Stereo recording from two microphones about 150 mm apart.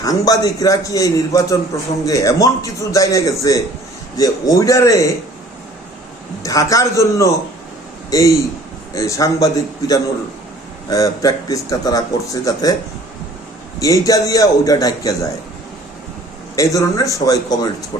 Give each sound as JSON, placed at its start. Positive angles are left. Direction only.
{"t": 0.0, "sound": "a man's voice", "side_deg": 25}
{"t": 6.4, "sound": "a man's voice", "side_deg": 20}
{"t": 13.7, "sound": "a man's voice", "side_deg": 25}
{"t": 16.6, "sound": "a man's voice", "side_deg": 20}